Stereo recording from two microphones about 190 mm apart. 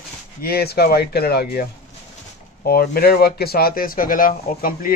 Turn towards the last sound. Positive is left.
turn(degrees=50)  # may be behind; listen again after turning